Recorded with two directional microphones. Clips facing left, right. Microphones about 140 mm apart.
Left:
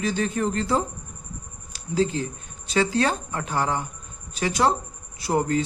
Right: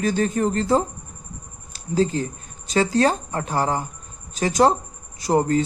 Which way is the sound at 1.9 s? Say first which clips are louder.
Right 2 dB; 40° right (ahead or behind).